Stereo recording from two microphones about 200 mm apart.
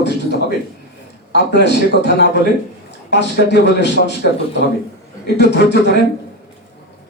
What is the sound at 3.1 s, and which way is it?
Speech, 60° left (ahead or behind).